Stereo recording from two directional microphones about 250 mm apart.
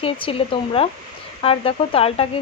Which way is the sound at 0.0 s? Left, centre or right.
Left.